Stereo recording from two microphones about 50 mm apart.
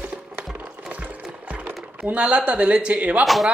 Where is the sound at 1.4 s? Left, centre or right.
Right.